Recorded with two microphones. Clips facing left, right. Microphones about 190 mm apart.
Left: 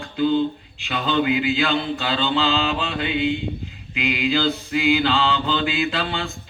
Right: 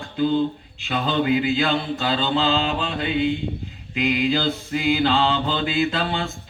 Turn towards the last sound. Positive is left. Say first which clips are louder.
# right 2 dB
turn(degrees=-40)  # may be behind; listen again after turning